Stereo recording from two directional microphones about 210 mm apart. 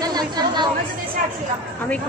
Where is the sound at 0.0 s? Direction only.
20° right (ahead or behind).